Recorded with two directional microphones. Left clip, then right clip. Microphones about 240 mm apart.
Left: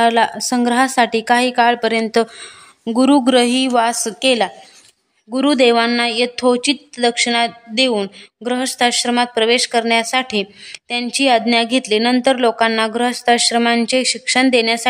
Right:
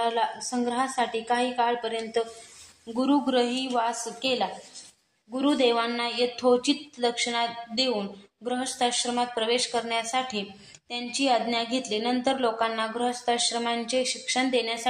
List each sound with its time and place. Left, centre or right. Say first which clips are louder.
0.0 s speech: left 12 dB; left